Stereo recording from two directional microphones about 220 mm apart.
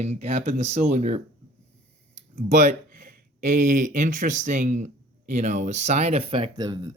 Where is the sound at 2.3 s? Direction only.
35° right (ahead or behind).